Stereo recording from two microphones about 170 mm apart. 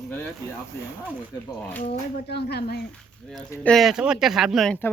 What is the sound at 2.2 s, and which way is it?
Speech, 75° left (ahead or behind).